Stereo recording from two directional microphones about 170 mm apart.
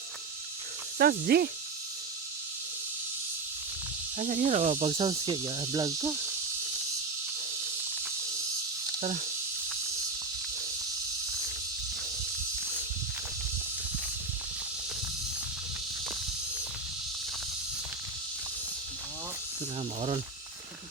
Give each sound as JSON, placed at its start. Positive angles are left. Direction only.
{"t": 0.9, "sound": "speech", "side_deg": -65}
{"t": 4.2, "sound": "speech", "side_deg": -50}
{"t": 4.9, "sound": "cricket", "side_deg": -30}
{"t": 9.0, "sound": "speech", "side_deg": -45}